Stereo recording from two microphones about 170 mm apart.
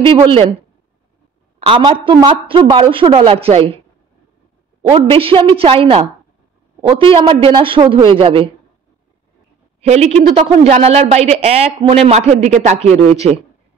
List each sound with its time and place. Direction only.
0.0 s a woman's voice: 30° right (ahead or behind)
4.9 s a woman's voice: 30° right (ahead or behind)
9.8 s a woman's voice: 40° right (ahead or behind)